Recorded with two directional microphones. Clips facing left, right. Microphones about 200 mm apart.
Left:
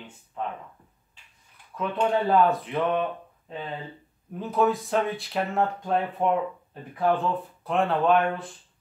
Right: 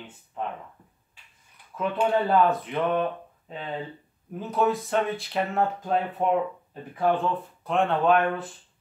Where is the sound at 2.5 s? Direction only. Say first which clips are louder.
Even; centre (ahead or behind).